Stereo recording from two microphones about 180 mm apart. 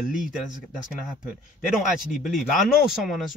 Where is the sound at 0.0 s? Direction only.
50° left (ahead or behind).